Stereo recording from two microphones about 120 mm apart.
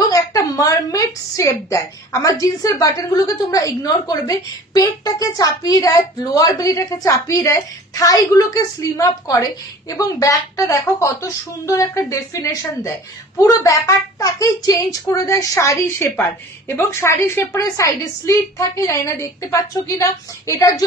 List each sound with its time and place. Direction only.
0.1 s a woman's voice: 30° left (ahead or behind)